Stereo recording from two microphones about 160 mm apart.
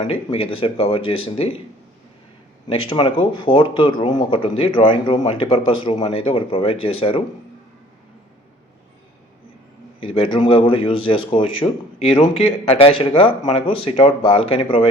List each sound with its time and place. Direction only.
0.0 s speech: 35° left (ahead or behind)
2.6 s speech: 30° left (ahead or behind)
10.0 s speech: 30° left (ahead or behind)